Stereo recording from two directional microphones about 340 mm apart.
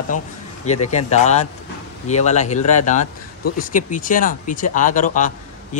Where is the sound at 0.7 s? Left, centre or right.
Centre.